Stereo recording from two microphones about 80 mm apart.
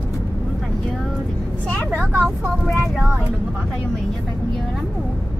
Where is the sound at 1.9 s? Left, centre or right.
Right.